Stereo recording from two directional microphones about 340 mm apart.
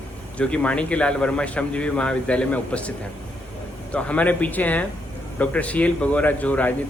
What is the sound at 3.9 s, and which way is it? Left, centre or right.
A man's voice, centre.